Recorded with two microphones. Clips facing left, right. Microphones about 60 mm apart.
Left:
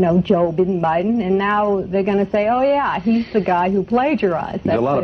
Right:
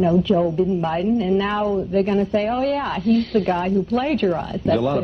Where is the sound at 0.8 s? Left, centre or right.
Left.